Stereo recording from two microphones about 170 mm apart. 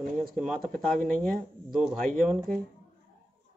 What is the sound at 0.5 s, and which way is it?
Speech, 55° right (ahead or behind).